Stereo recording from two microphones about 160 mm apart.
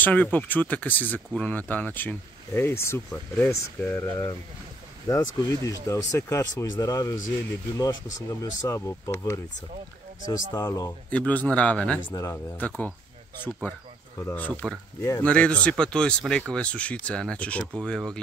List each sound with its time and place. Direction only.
0.0 s speech: 10° left (ahead or behind)
11.1 s speech: 10° left (ahead or behind)
12.1 s speech: 20° left (ahead or behind)
15.0 s speech: 20° left (ahead or behind)
15.2 s speech: 10° left (ahead or behind)